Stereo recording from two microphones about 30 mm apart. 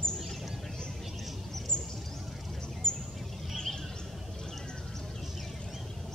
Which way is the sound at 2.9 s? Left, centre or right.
Left.